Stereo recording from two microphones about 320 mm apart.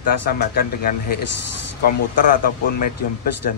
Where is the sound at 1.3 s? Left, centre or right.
Left.